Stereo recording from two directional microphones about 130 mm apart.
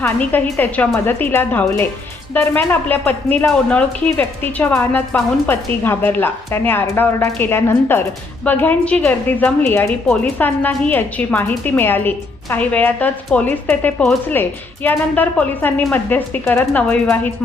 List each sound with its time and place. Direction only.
0.0 s a woman's voice: 15° left (ahead or behind)